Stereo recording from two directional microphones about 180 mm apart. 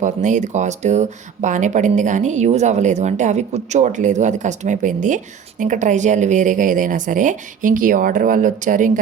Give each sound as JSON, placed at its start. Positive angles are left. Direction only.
{"t": 0.0, "sound": "speech", "side_deg": -45}